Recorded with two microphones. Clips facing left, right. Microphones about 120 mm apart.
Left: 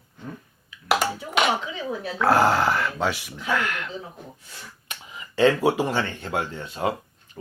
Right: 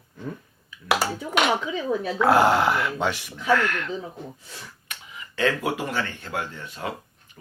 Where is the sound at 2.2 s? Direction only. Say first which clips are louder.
Right 1 dB; centre (ahead or behind).